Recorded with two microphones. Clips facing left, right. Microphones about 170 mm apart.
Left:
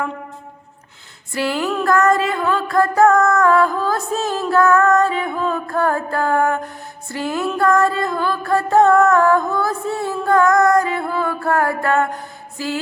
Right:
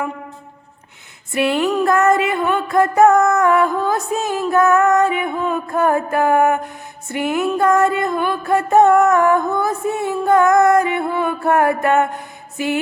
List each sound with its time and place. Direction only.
1.3 s music: 20° right (ahead or behind)